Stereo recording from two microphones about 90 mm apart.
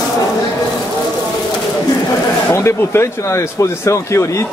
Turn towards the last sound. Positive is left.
turn(degrees=35)  # may be behind; listen again after turning